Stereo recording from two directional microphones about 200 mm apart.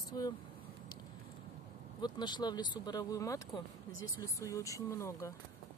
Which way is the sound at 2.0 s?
20° left (ahead or behind).